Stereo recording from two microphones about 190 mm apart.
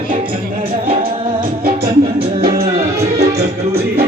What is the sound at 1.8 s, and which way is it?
Music, 30° right (ahead or behind).